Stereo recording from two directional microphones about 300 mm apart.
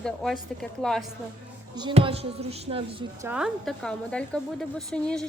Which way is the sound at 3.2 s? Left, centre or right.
Centre.